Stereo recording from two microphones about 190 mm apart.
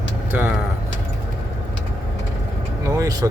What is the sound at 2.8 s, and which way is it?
Vehicle, 15° right (ahead or behind).